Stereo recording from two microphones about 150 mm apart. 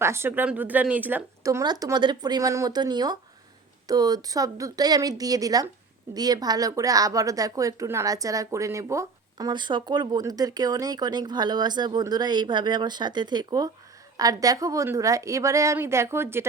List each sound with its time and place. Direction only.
0.0 s speech: 15° right (ahead or behind)